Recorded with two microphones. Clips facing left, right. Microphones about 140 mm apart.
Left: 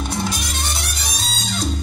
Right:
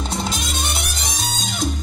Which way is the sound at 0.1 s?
25° right (ahead or behind).